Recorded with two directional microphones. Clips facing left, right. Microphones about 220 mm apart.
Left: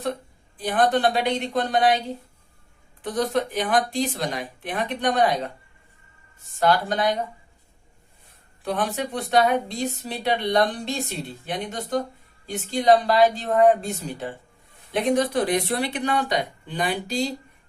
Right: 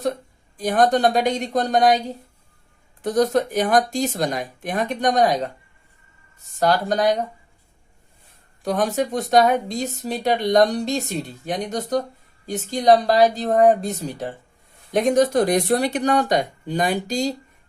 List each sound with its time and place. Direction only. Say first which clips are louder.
0.0 s speech: right 4 dB; 45° right (ahead or behind)
3.0 s speech: right 5 dB; 45° right (ahead or behind)
8.6 s speech: right 5 dB; 40° right (ahead or behind)